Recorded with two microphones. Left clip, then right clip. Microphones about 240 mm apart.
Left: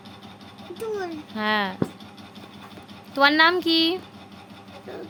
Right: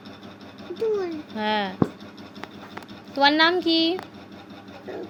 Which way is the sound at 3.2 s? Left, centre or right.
Left.